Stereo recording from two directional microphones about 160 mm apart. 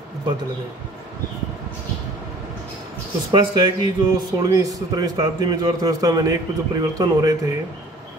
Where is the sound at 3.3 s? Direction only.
30° right (ahead or behind).